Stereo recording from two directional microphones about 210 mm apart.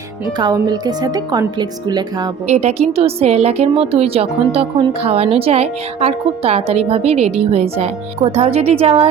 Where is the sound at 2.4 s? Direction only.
30° right (ahead or behind).